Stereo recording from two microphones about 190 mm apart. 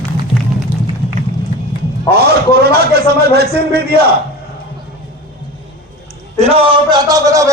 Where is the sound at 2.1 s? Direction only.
55° right (ahead or behind).